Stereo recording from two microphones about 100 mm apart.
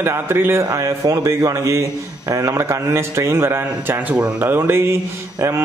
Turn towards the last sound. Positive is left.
turn(degrees=-30)  # may be behind; listen again after turning